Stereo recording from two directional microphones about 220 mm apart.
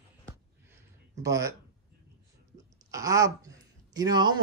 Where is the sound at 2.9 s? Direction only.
15° right (ahead or behind).